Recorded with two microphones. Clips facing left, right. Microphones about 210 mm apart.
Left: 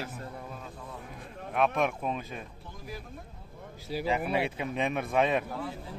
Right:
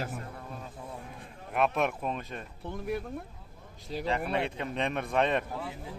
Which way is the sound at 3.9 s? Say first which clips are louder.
Left 1 dB; 5° left (ahead or behind).